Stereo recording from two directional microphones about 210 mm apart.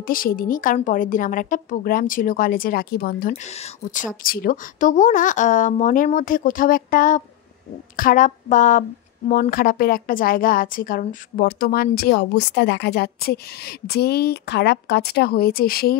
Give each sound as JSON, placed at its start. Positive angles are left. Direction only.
{"t": 0.0, "sound": "a woman's voice", "side_deg": 45}